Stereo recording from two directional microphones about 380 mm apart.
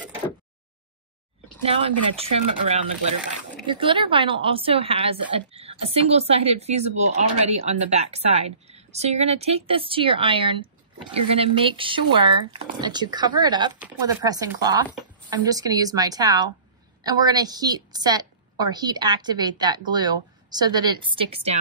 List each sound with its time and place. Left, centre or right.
1.7 s speech: centre